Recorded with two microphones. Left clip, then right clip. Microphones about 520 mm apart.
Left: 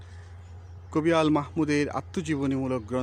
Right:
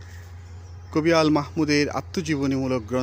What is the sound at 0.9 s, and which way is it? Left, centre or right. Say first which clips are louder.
Speech: right 4 dB; left.